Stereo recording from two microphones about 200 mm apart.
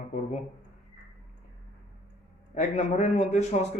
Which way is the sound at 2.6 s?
35° left (ahead or behind).